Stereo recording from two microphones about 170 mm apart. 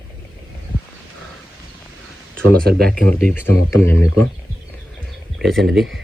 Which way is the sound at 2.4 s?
5° left (ahead or behind).